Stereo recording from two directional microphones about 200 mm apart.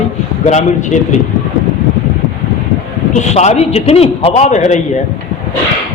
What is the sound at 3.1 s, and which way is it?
A man's voice, 35° left (ahead or behind).